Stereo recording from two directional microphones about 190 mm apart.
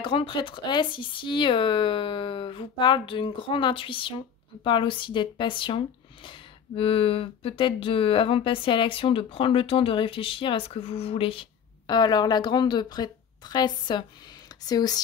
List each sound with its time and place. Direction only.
0.0 s speech: 25° left (ahead or behind)